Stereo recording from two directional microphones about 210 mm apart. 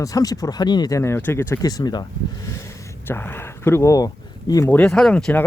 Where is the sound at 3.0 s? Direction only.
10° left (ahead or behind).